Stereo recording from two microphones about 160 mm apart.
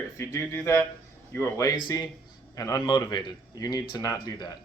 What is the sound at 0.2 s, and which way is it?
Speech, 20° left (ahead or behind).